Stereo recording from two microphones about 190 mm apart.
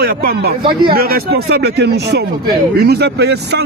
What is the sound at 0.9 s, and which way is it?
Speech, 55° right (ahead or behind).